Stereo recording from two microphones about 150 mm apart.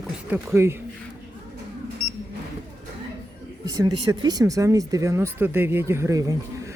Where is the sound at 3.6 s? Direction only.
20° right (ahead or behind).